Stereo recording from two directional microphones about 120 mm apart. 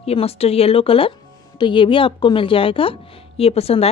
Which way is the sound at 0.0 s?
55° left (ahead or behind).